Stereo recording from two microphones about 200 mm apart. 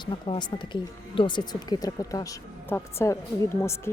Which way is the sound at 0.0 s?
25° left (ahead or behind).